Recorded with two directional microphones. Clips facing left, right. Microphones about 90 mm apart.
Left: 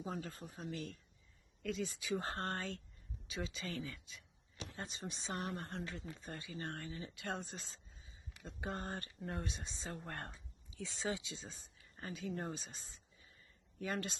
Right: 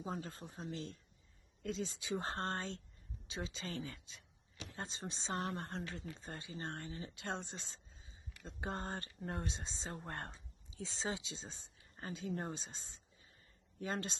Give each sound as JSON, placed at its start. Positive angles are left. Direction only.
{"t": 0.0, "sound": "speech", "side_deg": -30}